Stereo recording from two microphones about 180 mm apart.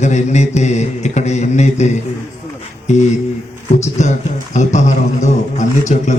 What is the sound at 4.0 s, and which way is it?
Mantra, 40° left (ahead or behind).